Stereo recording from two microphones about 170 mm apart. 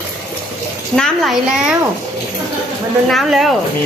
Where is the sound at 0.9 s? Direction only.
Centre (ahead or behind).